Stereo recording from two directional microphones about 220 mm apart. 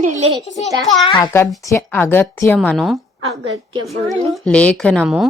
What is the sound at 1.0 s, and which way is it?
A child's voice, 20° left (ahead or behind).